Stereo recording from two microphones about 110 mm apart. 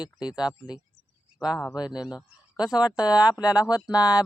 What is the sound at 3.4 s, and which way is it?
Speech, 10° right (ahead or behind).